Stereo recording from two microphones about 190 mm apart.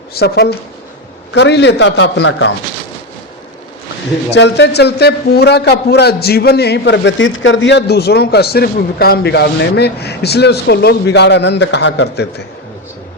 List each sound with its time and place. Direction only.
0.1 s a man's voice: 55° left (ahead or behind)
4.3 s a man's voice: 65° left (ahead or behind)